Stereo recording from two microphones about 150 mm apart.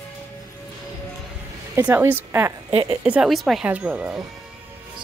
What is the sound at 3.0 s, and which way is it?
Speech, 5° right (ahead or behind).